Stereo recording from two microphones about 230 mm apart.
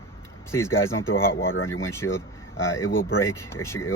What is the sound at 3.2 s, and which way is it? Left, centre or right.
Speech, centre.